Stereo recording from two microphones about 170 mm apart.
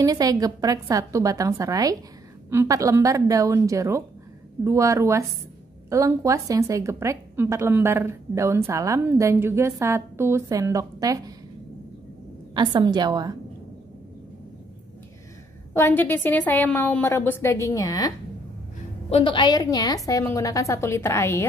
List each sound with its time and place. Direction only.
0.0 s a woman's voice: 20° right (ahead or behind)
12.5 s a woman's voice: 25° right (ahead or behind)
15.7 s a woman's voice: 15° left (ahead or behind)